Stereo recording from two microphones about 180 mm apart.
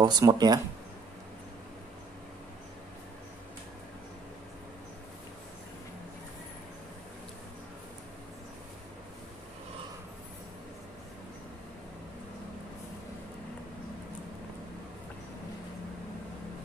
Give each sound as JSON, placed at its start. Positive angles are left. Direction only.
{"t": 0.0, "sound": "speech", "side_deg": -25}